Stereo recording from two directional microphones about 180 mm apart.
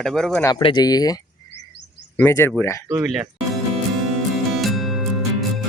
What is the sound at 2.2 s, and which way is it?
Speech, 15° left (ahead or behind).